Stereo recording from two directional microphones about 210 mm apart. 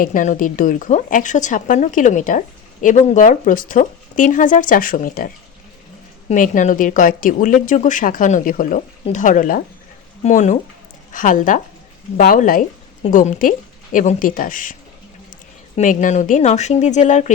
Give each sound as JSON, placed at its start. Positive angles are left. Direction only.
{"t": 0.0, "sound": "speech", "side_deg": 40}